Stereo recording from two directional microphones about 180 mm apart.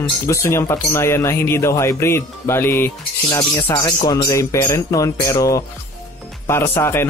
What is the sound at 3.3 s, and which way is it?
Speech, 25° left (ahead or behind).